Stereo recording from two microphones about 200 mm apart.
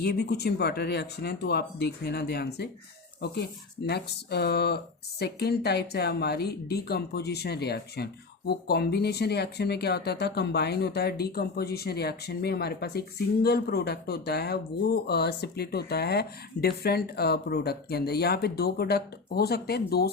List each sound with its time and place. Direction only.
0.0 s speech: 55° left (ahead or behind)